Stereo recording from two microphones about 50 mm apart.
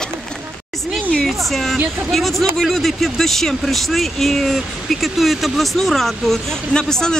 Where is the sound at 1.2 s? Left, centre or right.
Centre.